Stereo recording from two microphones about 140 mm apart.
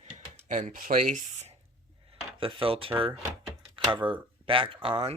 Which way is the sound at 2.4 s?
40° right (ahead or behind).